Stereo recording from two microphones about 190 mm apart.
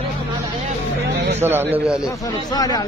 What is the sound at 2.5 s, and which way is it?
Speech, 20° left (ahead or behind).